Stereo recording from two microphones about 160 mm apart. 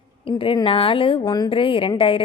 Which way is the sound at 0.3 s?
35° left (ahead or behind).